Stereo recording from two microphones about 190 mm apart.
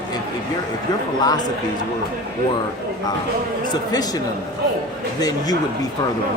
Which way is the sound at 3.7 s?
20° left (ahead or behind).